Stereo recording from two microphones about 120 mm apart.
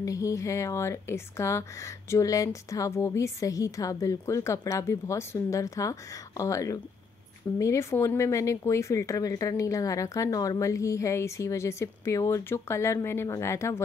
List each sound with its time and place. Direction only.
0.0 s speech: 25° left (ahead or behind)